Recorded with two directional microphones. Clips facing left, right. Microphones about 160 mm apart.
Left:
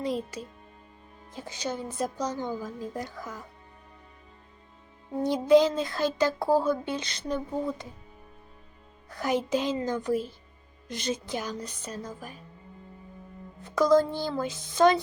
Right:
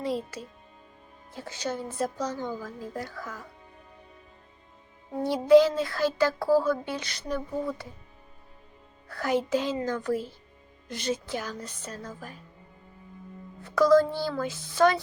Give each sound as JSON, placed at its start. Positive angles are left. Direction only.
{"t": 0.0, "sound": "a woman's voice", "side_deg": 15}
{"t": 5.2, "sound": "speech", "side_deg": 20}
{"t": 9.0, "sound": "a woman's voice", "side_deg": 15}
{"t": 13.6, "sound": "speech", "side_deg": 20}